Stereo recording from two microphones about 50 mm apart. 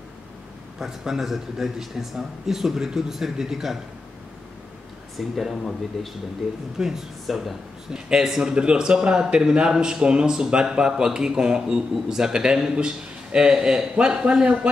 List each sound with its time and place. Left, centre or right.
0.7 s speech: centre
5.1 s speech: centre
6.8 s speech: centre